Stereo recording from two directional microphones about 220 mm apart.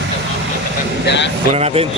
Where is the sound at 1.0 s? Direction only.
55° left (ahead or behind).